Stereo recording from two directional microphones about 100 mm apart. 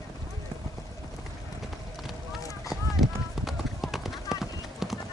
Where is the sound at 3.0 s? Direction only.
Centre (ahead or behind).